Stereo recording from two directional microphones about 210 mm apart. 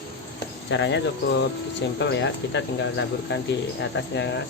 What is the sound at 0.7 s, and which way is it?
Speech, 55° left (ahead or behind).